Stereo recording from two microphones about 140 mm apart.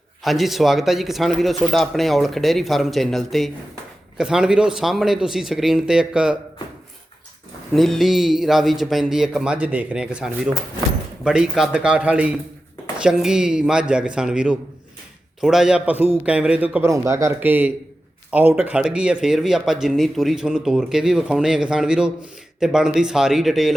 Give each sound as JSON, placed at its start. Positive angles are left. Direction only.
{"t": 0.2, "sound": "speech", "side_deg": 0}
{"t": 7.7, "sound": "speech", "side_deg": 0}
{"t": 16.9, "sound": "speech", "side_deg": -20}